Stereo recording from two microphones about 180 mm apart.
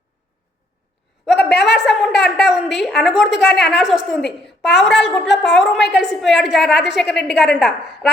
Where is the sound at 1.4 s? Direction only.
70° left (ahead or behind).